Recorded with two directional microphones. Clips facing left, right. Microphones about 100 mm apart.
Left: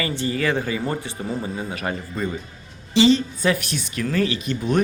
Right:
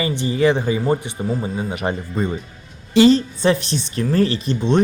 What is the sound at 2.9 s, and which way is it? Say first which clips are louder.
Speech: right 4 dB; 50° right (ahead or behind).